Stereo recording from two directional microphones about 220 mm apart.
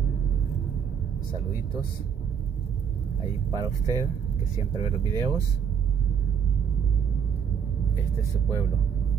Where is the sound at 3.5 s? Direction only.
15° right (ahead or behind).